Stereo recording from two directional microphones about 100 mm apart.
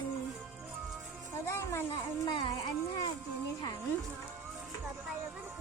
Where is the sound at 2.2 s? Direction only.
50° left (ahead or behind).